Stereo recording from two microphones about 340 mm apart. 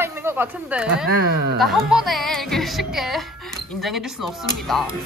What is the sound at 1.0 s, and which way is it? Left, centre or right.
Speech, right.